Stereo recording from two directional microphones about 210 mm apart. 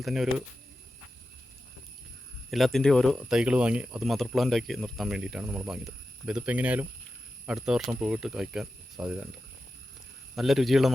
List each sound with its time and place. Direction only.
0.0 s speech: centre (ahead or behind)
2.5 s speech: centre (ahead or behind)
10.3 s speech: centre (ahead or behind)